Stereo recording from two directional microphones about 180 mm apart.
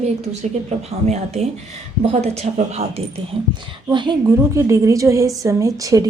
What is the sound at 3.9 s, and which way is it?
A woman's voice, 25° right (ahead or behind).